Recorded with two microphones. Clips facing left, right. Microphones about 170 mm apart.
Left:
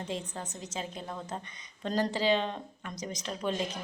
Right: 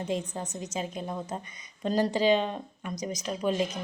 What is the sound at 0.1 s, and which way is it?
A woman's voice, 15° right (ahead or behind).